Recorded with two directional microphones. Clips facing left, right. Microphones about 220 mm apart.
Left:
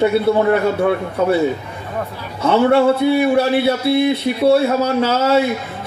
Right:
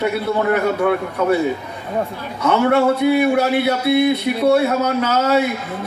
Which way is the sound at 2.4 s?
30° left (ahead or behind).